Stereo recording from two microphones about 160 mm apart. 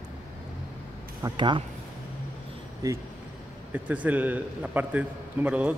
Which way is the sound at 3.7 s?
10° right (ahead or behind).